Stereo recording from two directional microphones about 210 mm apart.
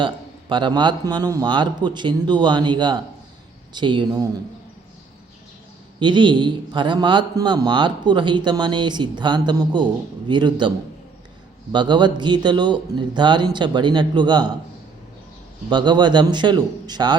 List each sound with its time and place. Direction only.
0.0 s a man's voice: 20° right (ahead or behind)
6.0 s a man's voice: 20° right (ahead or behind)
11.7 s a man's voice: 20° right (ahead or behind)
15.7 s a man's voice: 20° right (ahead or behind)